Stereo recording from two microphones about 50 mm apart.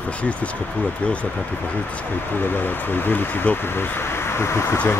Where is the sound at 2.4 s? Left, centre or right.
Left.